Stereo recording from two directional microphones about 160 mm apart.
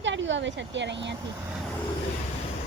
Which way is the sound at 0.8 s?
90° right.